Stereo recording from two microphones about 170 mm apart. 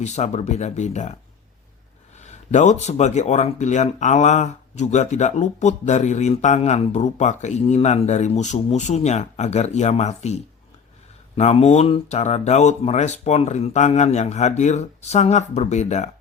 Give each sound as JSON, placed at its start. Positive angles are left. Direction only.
{"t": 0.0, "sound": "speech", "side_deg": 40}
{"t": 2.2, "sound": "speech", "side_deg": 45}